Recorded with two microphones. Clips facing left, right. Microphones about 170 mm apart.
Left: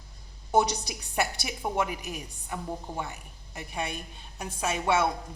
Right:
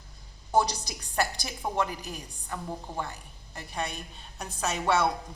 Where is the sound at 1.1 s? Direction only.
15° left (ahead or behind).